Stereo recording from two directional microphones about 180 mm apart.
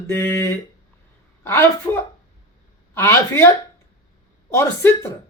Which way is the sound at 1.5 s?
15° left (ahead or behind).